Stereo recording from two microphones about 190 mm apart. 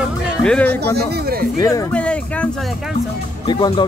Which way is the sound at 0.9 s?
55° right (ahead or behind).